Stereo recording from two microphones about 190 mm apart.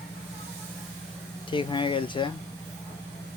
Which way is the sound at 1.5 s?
25° left (ahead or behind).